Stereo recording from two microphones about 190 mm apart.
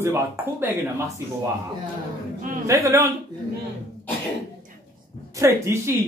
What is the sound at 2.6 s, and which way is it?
Speech, 15° right (ahead or behind).